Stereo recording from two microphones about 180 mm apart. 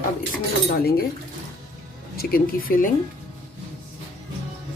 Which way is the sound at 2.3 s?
55° left (ahead or behind).